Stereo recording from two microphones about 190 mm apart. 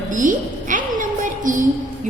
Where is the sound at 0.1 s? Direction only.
45° right (ahead or behind).